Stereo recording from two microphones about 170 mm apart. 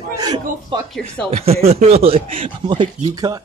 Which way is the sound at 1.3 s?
35° right (ahead or behind).